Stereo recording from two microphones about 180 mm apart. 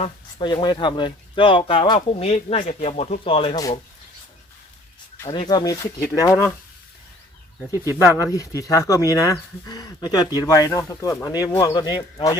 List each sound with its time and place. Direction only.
0.0 s speech: 25° left (ahead or behind)
3.5 s speech: 20° left (ahead or behind)
5.1 s speech: 20° left (ahead or behind)
7.9 s speech: 15° right (ahead or behind)
8.2 s speech: 20° left (ahead or behind)